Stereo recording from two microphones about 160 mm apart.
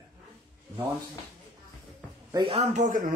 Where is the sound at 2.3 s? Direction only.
35° right (ahead or behind).